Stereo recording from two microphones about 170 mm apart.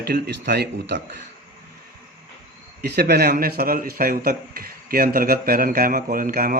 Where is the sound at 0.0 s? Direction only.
70° right (ahead or behind); by 1.2 s 85° right.